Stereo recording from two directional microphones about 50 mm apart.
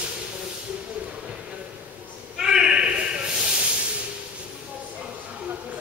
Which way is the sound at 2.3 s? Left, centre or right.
Centre.